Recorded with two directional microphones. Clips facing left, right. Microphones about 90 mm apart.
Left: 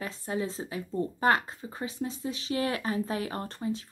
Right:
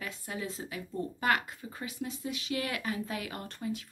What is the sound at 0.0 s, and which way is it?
Speech, 30° left (ahead or behind).